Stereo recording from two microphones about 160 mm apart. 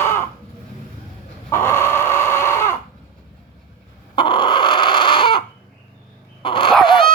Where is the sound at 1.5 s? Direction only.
15° left (ahead or behind).